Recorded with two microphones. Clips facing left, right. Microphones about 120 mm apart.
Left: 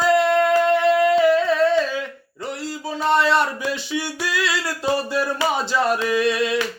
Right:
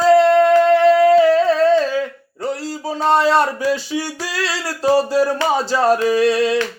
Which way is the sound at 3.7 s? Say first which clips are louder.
Right 5 dB; 35° right (ahead or behind).